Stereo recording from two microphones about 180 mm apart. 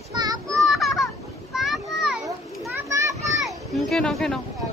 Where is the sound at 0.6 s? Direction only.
Centre (ahead or behind).